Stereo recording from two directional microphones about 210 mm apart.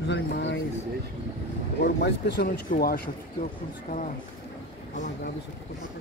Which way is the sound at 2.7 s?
40° left (ahead or behind).